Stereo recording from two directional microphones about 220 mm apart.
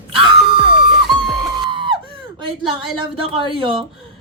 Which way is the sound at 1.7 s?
20° right (ahead or behind).